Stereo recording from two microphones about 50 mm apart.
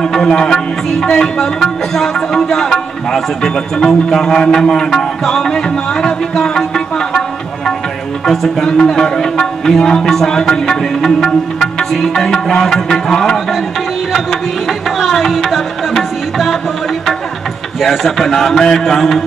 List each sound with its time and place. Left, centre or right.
0.0 s a man's voice: centre
15.0 s music: centre
17.7 s a man's voice: centre